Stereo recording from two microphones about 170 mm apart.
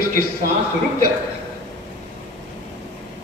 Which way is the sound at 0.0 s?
55° right (ahead or behind).